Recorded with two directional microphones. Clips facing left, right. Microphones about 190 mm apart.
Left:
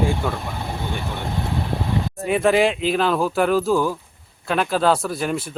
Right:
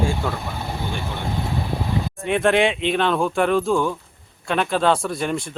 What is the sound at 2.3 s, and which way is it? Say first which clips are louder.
Speech: left 1 dB; 5° left (ahead or behind).